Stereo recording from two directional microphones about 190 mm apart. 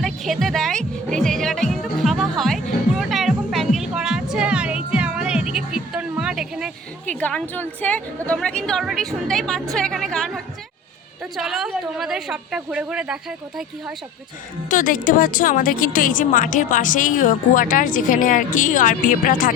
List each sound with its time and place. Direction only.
0.0 s music: centre (ahead or behind)
7.1 s a woman's voice: 5° left (ahead or behind)
14.7 s a woman's voice: 45° left (ahead or behind)